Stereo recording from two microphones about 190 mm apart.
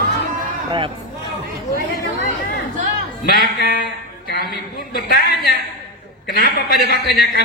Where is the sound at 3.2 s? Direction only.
55° left (ahead or behind).